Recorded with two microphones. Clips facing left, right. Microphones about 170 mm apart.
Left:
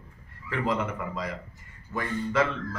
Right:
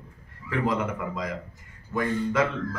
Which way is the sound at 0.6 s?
45° right (ahead or behind).